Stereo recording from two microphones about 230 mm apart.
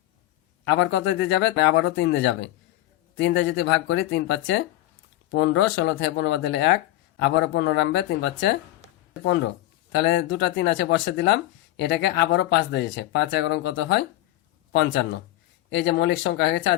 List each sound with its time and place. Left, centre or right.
0.6 s speech: left
10.0 s speech: left